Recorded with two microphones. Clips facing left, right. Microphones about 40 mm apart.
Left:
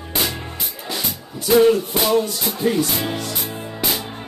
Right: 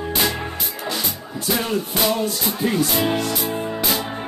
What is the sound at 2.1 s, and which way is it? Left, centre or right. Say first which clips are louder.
Music: left 3 dB; centre.